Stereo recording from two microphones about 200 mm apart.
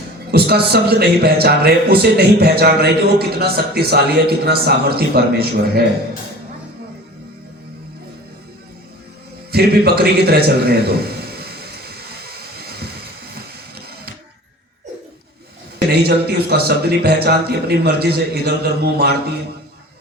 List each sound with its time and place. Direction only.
0.3 s a man's voice: 50° right (ahead or behind)
9.5 s a sound: 50° right (ahead or behind)
13.7 s printer: 55° right (ahead or behind)
15.9 s a man's voice: 50° right (ahead or behind)